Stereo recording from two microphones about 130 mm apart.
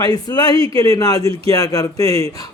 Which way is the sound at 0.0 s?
30° left (ahead or behind).